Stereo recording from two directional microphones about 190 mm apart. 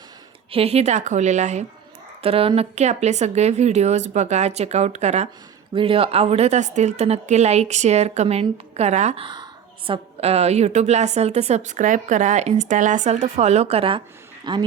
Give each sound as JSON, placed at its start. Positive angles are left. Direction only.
{"t": 0.5, "sound": "a woman's voice", "side_deg": -30}